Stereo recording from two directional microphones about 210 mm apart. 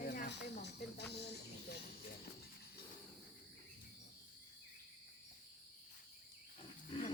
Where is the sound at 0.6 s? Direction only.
50° left (ahead or behind).